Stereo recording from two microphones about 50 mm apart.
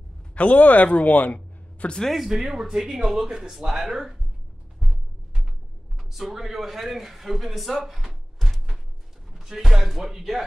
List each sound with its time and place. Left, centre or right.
0.3 s speech: left
2.1 s speech: centre
4.7 s music: centre
5.9 s speech: centre